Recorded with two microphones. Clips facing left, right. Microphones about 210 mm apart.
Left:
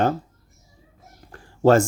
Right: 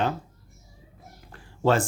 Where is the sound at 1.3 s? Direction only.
45° left (ahead or behind).